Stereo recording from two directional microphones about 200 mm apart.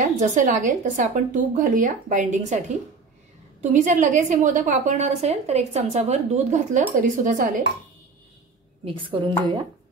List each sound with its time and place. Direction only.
0.2 s a woman's voice: 40° right (ahead or behind)
3.7 s a woman's voice: 40° right (ahead or behind)
8.8 s a woman's voice: 25° right (ahead or behind)